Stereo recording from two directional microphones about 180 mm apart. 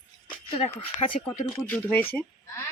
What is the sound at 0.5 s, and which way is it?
Speech, 35° left (ahead or behind).